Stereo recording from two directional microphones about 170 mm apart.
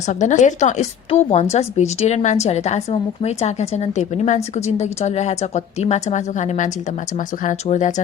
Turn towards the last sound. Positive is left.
turn(degrees=45)  # may be behind; listen again after turning